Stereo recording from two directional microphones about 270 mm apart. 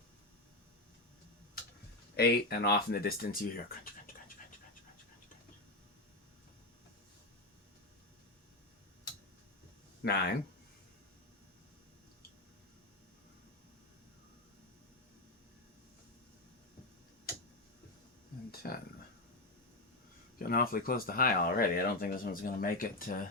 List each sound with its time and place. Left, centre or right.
2.1 s speech: left
10.0 s speech: left
18.6 s speech: left
20.4 s speech: left